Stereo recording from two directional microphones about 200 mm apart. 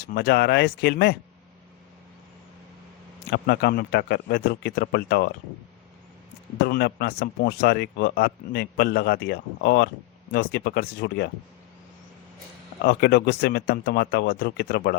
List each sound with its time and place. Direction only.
0.1 s speech: 50° left (ahead or behind)
3.2 s speech: 55° left (ahead or behind)
6.7 s speech: 55° left (ahead or behind)
12.8 s speech: 55° left (ahead or behind)